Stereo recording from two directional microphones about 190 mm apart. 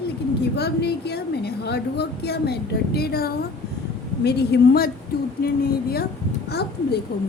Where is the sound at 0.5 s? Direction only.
60° left (ahead or behind).